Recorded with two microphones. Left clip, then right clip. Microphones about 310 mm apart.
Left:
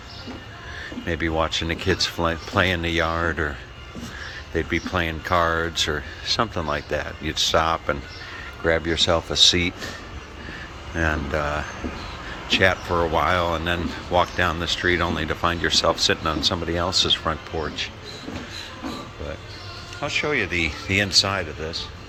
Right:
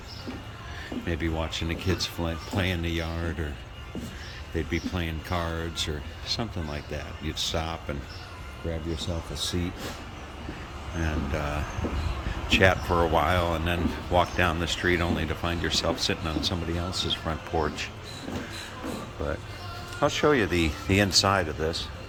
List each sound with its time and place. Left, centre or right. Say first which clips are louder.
1.0 s speech: left 8 dB; centre
4.5 s speech: left 8 dB; centre
11.0 s speech: left 8 dB; centre
20.0 s a man's voice: even; right